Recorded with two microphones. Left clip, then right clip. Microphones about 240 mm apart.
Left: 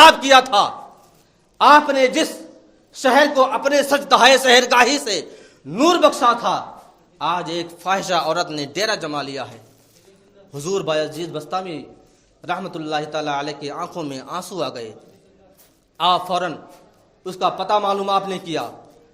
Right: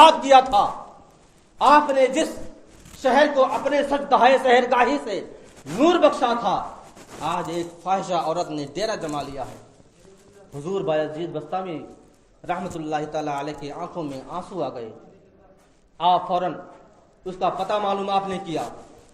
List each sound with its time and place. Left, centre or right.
0.0 s a sound: left
1.5 s a man's voice: left
10.5 s a man's voice: left
16.0 s a man's voice: left